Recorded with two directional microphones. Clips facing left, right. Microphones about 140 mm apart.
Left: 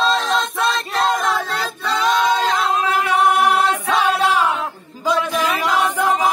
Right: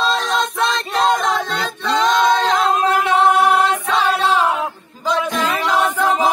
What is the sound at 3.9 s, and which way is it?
Music, 10° left (ahead or behind).